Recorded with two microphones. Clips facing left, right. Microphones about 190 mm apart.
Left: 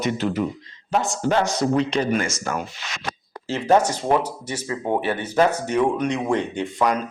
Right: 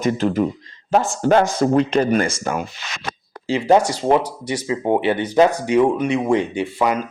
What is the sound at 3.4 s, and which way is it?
Speech, 15° right (ahead or behind).